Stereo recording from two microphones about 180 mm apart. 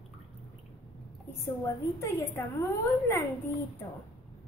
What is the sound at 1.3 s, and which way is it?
A woman's voice, 15° left (ahead or behind).